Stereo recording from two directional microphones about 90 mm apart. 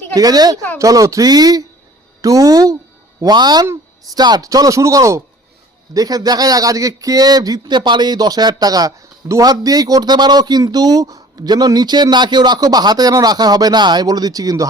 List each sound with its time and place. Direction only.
0.1 s speech: 45° right (ahead or behind)